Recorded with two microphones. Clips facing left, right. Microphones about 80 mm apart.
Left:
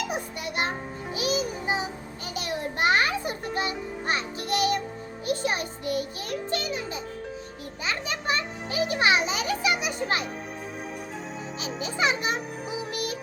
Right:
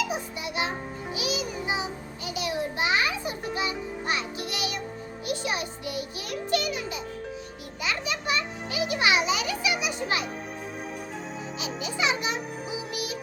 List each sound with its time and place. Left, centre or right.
0.0 s music: left
2.3 s a sound: left
3.5 s music: left
6.5 s a child's voice: left
7.9 s music: left
11.6 s a child's voice: left